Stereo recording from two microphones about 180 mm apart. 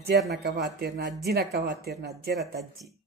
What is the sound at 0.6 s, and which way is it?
Speech, 60° right (ahead or behind).